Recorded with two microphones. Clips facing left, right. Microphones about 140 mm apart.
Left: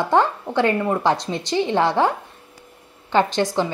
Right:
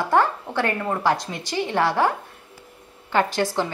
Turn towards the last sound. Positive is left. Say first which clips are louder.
# left 3 dB
turn(degrees=20)  # may be behind; listen again after turning